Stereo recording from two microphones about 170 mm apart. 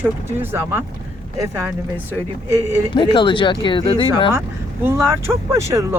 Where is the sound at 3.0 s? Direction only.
30° left (ahead or behind).